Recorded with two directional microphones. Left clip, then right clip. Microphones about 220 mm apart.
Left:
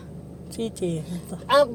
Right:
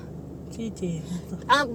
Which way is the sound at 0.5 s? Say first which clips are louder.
Left 6 dB; 55° left (ahead or behind).